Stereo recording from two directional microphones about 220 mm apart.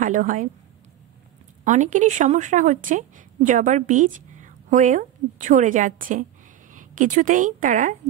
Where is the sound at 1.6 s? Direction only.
35° right (ahead or behind).